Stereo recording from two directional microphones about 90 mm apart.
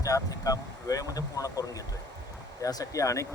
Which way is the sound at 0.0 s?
40° left (ahead or behind).